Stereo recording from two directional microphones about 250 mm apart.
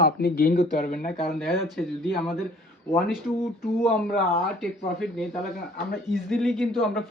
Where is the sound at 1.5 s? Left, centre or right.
Centre.